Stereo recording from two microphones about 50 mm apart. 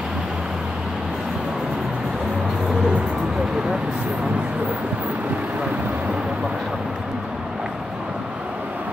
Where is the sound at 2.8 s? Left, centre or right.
Centre.